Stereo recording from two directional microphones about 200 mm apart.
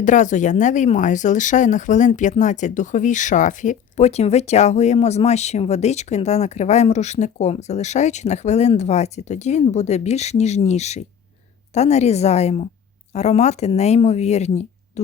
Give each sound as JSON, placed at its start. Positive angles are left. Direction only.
{"t": 0.0, "sound": "speech", "side_deg": 40}